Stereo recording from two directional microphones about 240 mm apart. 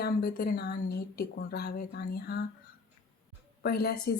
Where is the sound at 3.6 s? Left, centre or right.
Left.